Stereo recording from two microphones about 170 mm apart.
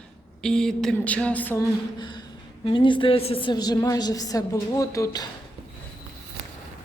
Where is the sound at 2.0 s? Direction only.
25° left (ahead or behind).